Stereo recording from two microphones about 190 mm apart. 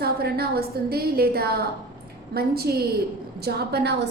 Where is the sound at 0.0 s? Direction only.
55° right (ahead or behind).